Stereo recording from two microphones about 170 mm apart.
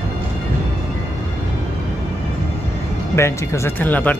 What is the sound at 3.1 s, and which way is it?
Speech, 15° left (ahead or behind).